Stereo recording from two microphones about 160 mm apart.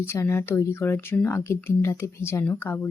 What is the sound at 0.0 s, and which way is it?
Speech, 15° left (ahead or behind).